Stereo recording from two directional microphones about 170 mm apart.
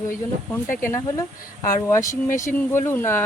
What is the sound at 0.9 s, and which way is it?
Speech, 15° left (ahead or behind).